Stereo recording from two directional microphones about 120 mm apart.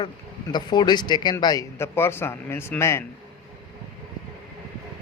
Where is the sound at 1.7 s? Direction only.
20° left (ahead or behind).